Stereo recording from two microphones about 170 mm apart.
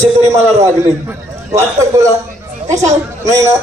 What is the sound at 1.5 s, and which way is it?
Speech, 15° right (ahead or behind).